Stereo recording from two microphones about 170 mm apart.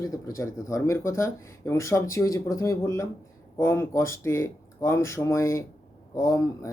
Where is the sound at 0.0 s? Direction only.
20° left (ahead or behind).